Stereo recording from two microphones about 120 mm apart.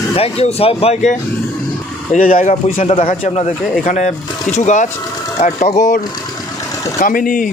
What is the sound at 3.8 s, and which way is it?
Speech, 90° left.